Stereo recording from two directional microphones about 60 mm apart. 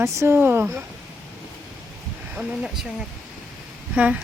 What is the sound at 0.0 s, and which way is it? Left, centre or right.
Speech, right.